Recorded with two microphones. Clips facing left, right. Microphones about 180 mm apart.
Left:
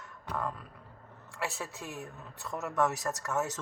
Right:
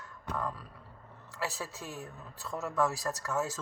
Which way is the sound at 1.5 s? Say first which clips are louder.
Left 1 dB; 20° left (ahead or behind).